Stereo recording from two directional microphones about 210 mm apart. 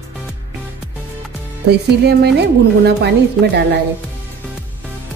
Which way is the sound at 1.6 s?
55° right (ahead or behind).